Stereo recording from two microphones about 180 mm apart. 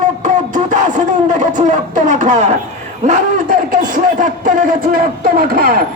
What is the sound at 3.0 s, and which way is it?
A man's voice, 45° right (ahead or behind).